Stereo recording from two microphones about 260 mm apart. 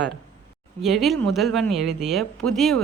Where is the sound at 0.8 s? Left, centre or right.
Centre.